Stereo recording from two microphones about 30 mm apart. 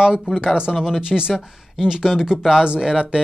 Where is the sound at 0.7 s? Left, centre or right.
Centre.